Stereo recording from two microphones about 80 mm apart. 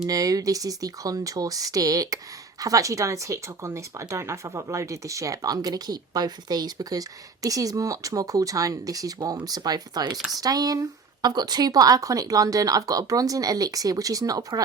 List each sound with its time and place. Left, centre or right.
0.1 s speech: right
7.4 s speech: right